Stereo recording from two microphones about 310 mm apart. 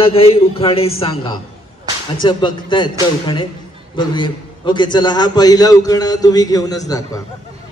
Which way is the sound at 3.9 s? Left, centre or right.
Centre.